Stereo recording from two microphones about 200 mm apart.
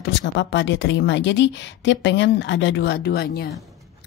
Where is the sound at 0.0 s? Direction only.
65° left (ahead or behind).